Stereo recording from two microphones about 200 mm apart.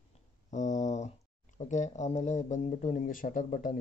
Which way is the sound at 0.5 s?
35° left (ahead or behind).